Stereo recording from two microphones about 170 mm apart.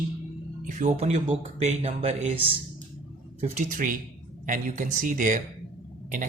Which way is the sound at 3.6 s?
50° right (ahead or behind).